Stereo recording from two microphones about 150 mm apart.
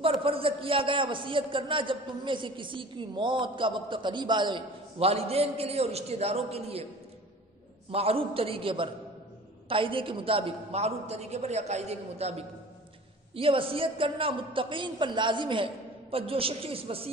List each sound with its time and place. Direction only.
0.0 s a man's voice: 40° right (ahead or behind)
7.9 s a man's voice: 40° right (ahead or behind)